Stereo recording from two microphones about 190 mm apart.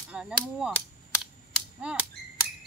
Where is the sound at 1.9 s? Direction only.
5° right (ahead or behind).